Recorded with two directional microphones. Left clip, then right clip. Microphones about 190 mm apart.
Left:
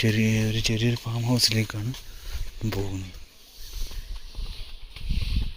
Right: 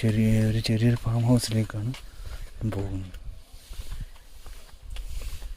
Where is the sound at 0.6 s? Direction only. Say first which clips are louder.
Left 1 dB; 25° right (ahead or behind).